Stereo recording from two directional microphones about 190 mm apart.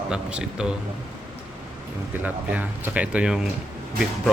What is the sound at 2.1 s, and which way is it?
Speech, 10° right (ahead or behind).